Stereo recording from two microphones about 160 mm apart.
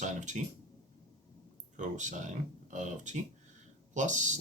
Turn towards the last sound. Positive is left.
turn(degrees=-50)  # may be behind; listen again after turning